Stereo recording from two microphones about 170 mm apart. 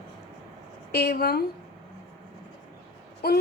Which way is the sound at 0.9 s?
70° left (ahead or behind).